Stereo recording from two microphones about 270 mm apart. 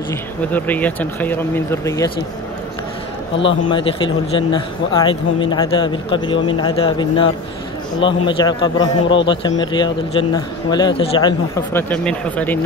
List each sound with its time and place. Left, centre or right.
0.1 s a man's voice: centre
3.7 s a man's voice: centre